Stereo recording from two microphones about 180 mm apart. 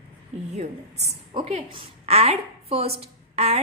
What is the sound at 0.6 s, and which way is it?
A woman's voice, 40° right (ahead or behind).